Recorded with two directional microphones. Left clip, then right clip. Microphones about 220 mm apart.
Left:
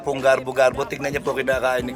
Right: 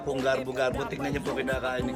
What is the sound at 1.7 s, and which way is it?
Speech, 20° left (ahead or behind).